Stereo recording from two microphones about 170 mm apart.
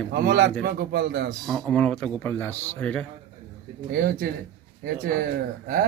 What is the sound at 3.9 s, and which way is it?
Speech, 60° right (ahead or behind).